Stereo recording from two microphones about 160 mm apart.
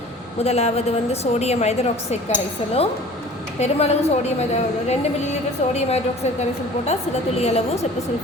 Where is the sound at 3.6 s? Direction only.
40° left (ahead or behind).